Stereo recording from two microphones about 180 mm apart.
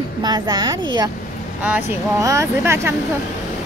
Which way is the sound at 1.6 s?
10° right (ahead or behind).